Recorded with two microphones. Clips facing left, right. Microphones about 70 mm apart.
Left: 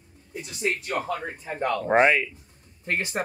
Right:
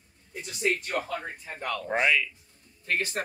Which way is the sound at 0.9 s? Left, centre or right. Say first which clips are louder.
Left 3 dB; left.